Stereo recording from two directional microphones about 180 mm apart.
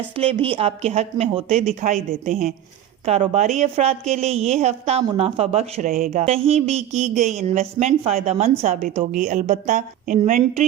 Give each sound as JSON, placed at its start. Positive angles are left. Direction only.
{"t": 0.2, "sound": "a woman's voice", "side_deg": -30}
{"t": 2.0, "sound": "a woman's voice", "side_deg": -50}
{"t": 5.9, "sound": "a woman's voice", "side_deg": -55}
{"t": 6.2, "sound": "a woman's voice", "side_deg": -35}